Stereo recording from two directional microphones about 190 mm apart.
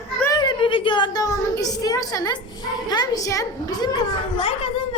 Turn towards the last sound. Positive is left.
turn(degrees=30)  # may be behind; listen again after turning